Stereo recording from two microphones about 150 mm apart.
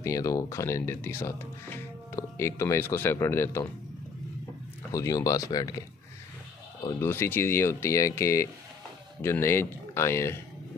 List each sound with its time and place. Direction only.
0.0 s speech: 20° left (ahead or behind)
4.9 s speech: 20° left (ahead or behind)
7.1 s speech: 15° left (ahead or behind)